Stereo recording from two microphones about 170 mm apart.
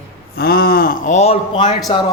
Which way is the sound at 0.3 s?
60° left (ahead or behind).